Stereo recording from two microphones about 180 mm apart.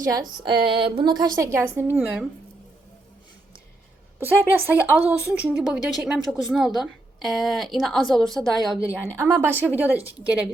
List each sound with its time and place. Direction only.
0.1 s a woman's voice: 25° right (ahead or behind)
4.2 s a woman's voice: 10° right (ahead or behind)